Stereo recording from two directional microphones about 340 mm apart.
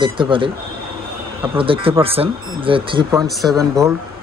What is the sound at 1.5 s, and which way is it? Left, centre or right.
Speech, centre.